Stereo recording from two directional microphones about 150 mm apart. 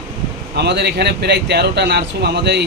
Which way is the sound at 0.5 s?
90° right.